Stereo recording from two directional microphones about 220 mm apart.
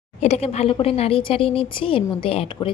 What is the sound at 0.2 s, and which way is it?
A woman's voice, 30° left (ahead or behind).